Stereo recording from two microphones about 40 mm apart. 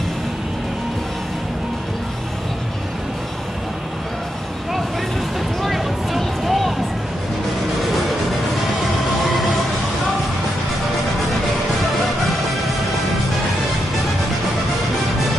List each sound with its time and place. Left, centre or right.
5.6 s music: centre